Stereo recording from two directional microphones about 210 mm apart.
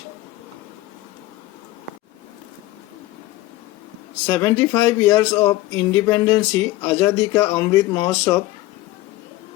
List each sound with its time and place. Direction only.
4.3 s speech: 15° left (ahead or behind)